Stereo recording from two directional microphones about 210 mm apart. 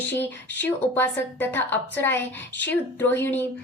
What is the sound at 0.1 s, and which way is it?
A woman's voice, 10° left (ahead or behind).